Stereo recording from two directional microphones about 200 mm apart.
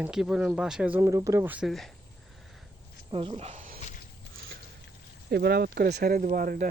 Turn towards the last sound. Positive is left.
turn(degrees=-45)  # may be behind; listen again after turning